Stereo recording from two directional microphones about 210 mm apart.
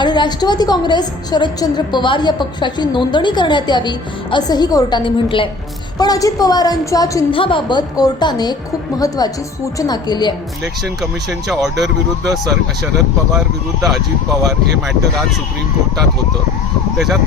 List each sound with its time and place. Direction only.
0.0 s a woman's voice: 20° left (ahead or behind)
10.8 s speech: centre (ahead or behind)